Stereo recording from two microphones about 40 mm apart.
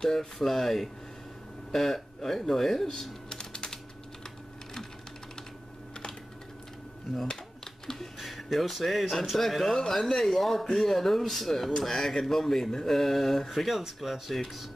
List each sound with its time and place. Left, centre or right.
0.0 s speech: centre
0.4 s speech: centre
3.3 s typing: centre
7.8 s a sound: centre
8.2 s speech: centre